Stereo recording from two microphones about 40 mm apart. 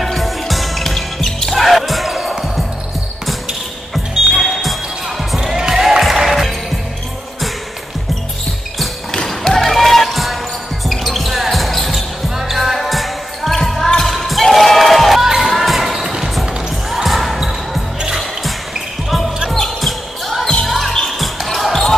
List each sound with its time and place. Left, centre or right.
0.0 s music: centre
3.9 s music: centre
9.3 s music: centre
10.9 s basketball bounce: centre
12.4 s music: centre
13.6 s basketball bounce: centre
16.0 s music: centre
16.9 s basketball bounce: centre
19.0 s basketball bounce: centre